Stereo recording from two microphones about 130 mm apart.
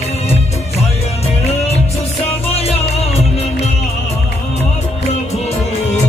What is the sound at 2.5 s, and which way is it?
Music, 50° left (ahead or behind).